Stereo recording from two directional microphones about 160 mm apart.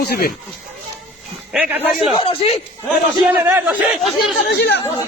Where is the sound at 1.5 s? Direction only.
10° right (ahead or behind).